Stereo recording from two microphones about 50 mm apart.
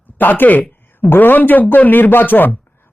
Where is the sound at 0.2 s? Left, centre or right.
Left.